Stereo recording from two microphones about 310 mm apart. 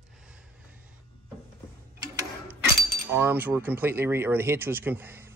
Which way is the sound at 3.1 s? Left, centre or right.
Centre.